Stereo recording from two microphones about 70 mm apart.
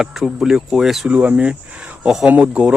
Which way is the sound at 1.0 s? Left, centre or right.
Centre.